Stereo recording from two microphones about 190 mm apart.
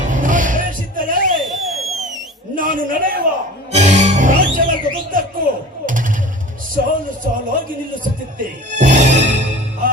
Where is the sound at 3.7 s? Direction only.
35° right (ahead or behind).